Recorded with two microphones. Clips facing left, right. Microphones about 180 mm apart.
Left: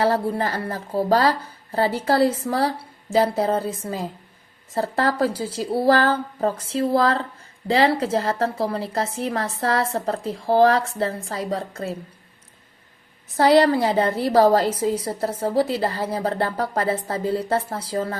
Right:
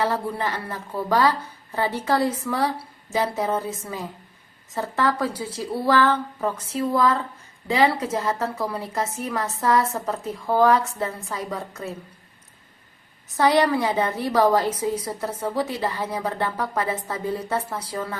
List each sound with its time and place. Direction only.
0.0 s a woman's voice: 35° left (ahead or behind)
7.9 s a woman's voice: 30° left (ahead or behind)
13.3 s a woman's voice: 30° left (ahead or behind)